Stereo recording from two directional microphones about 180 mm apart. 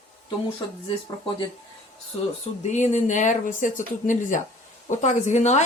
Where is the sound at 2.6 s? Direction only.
40° left (ahead or behind).